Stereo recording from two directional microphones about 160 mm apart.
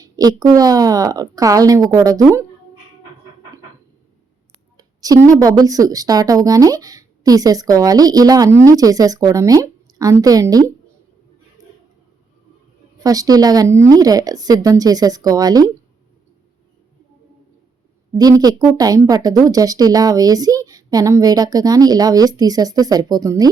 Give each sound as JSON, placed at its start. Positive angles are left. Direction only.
{"t": 0.0, "sound": "a woman's voice", "side_deg": -25}
{"t": 4.8, "sound": "a woman's voice", "side_deg": -25}
{"t": 11.6, "sound": "a sound", "side_deg": -20}
{"t": 13.0, "sound": "a woman's voice", "side_deg": -25}
{"t": 18.1, "sound": "a woman's voice", "side_deg": -25}